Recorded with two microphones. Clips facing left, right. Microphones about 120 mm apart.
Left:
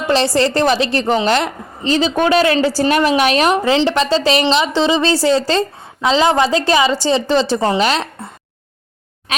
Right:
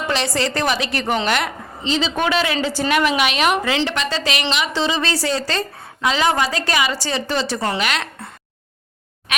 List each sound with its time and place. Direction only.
0.1 s a woman's voice: 35° left (ahead or behind)
1.8 s a man's voice: 45° left (ahead or behind); by 8.3 s 30° left (ahead or behind)